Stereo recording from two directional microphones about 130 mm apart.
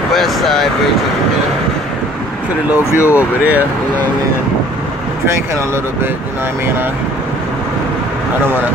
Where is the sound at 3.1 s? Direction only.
10° right (ahead or behind).